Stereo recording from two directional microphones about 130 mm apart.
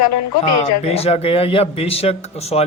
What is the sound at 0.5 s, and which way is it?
A man's voice, 50° left (ahead or behind).